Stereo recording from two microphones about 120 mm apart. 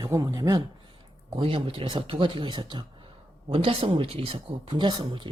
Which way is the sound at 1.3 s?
50° right (ahead or behind).